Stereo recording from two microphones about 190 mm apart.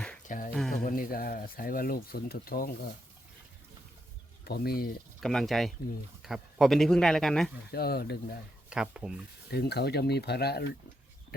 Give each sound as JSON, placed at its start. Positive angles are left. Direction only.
{"t": 0.3, "sound": "a sound", "side_deg": 45}
{"t": 0.9, "sound": "speech", "side_deg": 50}
{"t": 4.4, "sound": "speech", "side_deg": 55}
{"t": 5.2, "sound": "speech", "side_deg": 0}
{"t": 7.7, "sound": "speech", "side_deg": 55}
{"t": 8.7, "sound": "speech", "side_deg": -5}
{"t": 9.5, "sound": "speech", "side_deg": 60}